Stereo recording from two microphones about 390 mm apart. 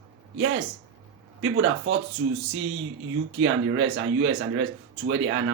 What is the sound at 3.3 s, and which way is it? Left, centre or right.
A man's voice, right.